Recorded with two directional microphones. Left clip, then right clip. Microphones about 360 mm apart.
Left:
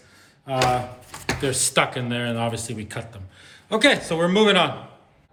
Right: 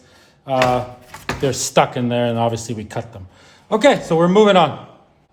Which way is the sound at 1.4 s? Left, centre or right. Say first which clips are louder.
Right 6 dB; right.